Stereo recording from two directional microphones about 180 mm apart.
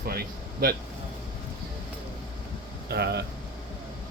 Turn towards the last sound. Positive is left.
turn(degrees=-65)  # may be behind; listen again after turning